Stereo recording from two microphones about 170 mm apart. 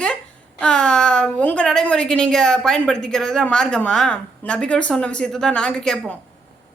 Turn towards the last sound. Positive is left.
turn(degrees=5)  # may be behind; listen again after turning